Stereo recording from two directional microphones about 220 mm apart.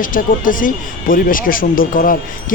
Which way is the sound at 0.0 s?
40° left (ahead or behind).